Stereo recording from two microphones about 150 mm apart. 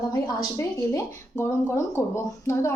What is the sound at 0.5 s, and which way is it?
A woman's voice, 20° left (ahead or behind).